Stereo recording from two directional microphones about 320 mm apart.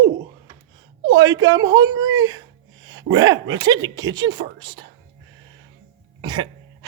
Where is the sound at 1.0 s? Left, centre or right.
Centre.